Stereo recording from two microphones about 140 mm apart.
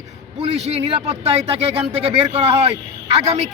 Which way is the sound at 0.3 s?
50° right (ahead or behind).